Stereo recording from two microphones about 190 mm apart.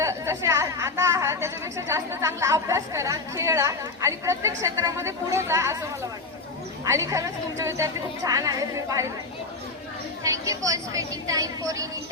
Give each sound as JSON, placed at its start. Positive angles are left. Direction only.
{"t": 0.0, "sound": "a woman's voice", "side_deg": -15}
{"t": 6.8, "sound": "a woman's voice", "side_deg": -15}
{"t": 10.2, "sound": "a woman's voice", "side_deg": -15}